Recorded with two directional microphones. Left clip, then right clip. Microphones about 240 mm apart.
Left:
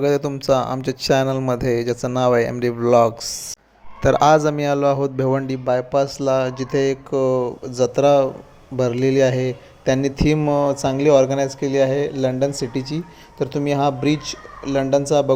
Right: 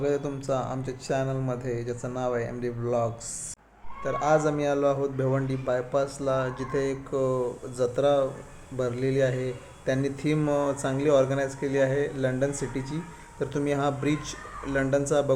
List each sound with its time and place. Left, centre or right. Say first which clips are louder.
0.0 s a man's voice: left 9 dB; left; by 15.3 s centre